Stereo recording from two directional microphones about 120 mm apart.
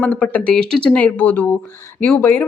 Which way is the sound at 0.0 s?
10° left (ahead or behind).